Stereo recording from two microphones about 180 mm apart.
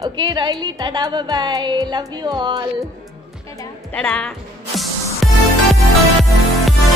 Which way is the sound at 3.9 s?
5° left (ahead or behind).